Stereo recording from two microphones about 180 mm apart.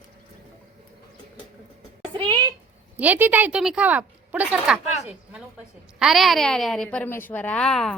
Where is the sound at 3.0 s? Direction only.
10° right (ahead or behind).